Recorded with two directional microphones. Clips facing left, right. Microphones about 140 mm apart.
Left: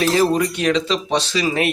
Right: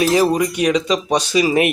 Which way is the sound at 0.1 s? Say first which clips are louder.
Right 1 dB; 15° right (ahead or behind).